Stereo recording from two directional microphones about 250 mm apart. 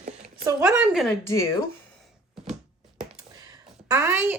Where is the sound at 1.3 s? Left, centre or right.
Centre.